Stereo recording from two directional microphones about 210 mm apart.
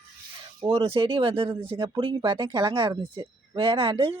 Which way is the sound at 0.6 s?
25° right (ahead or behind).